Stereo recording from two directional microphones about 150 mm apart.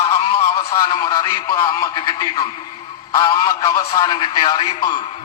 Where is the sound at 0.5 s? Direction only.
25° left (ahead or behind).